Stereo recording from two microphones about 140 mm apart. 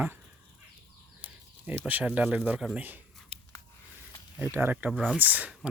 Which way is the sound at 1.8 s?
10° right (ahead or behind).